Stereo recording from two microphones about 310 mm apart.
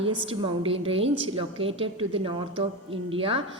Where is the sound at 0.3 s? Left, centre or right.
Centre.